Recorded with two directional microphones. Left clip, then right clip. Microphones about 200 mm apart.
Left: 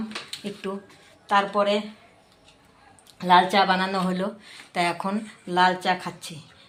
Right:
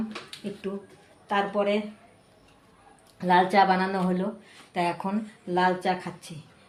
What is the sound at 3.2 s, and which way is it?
Speech, 5° left (ahead or behind).